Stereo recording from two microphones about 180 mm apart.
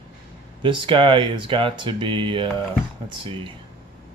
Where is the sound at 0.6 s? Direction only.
25° right (ahead or behind).